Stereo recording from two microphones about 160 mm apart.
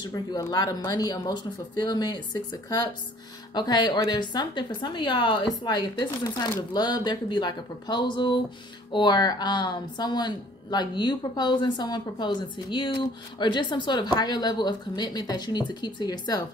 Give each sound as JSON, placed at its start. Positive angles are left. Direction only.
{"t": 0.0, "sound": "a woman's voice", "side_deg": 25}